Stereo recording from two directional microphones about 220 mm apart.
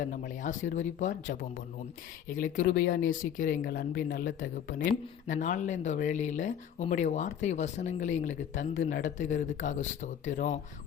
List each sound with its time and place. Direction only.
0.0 s speech: 35° left (ahead or behind)